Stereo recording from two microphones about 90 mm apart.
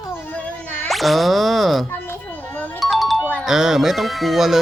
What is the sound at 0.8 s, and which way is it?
Speech, centre (ahead or behind).